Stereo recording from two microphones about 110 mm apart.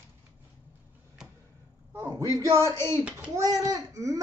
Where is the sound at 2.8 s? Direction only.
25° left (ahead or behind).